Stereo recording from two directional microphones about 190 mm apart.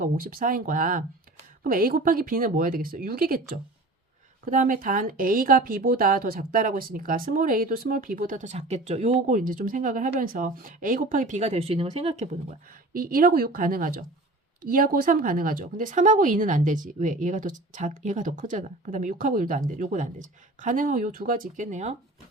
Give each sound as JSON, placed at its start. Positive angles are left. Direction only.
{"t": 0.0, "sound": "a woman's voice", "side_deg": -50}
{"t": 12.9, "sound": "a woman's voice", "side_deg": -50}